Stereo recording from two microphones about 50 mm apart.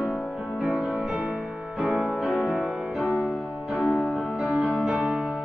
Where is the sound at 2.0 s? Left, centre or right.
Centre.